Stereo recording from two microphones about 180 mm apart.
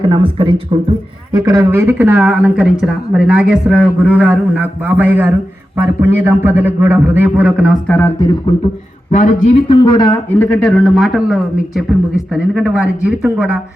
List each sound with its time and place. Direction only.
0.0 s a man's voice: 25° right (ahead or behind); by 7.8 s 5° right (ahead or behind)
7.9 s speech: 10° left (ahead or behind)
9.1 s a man's voice: 45° left (ahead or behind)
9.6 s a man's voice: 20° left (ahead or behind); by 13.6 s 5° right (ahead or behind)